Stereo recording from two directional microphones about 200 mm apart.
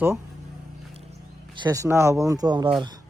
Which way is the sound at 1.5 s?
20° right (ahead or behind).